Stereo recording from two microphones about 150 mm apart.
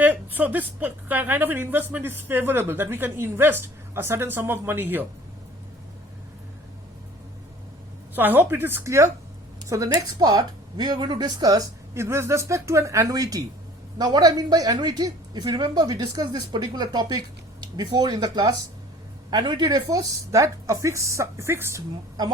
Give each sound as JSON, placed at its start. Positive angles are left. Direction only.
{"t": 0.0, "sound": "a woman's voice", "side_deg": -10}
{"t": 8.1, "sound": "a woman's voice", "side_deg": -15}